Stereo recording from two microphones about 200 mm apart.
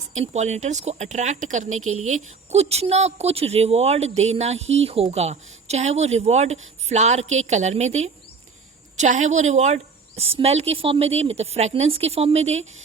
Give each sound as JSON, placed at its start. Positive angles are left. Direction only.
{"t": 0.1, "sound": "speech", "side_deg": -35}